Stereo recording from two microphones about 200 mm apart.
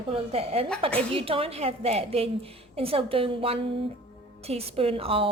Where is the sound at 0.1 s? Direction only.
30° right (ahead or behind).